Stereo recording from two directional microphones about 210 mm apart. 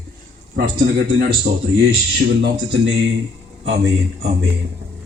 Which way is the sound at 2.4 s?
60° right (ahead or behind).